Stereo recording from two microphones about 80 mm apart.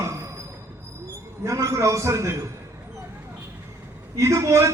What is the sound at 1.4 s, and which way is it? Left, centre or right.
Speech, right.